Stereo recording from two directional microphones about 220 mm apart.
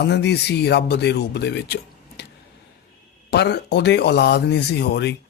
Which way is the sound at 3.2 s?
50° left (ahead or behind).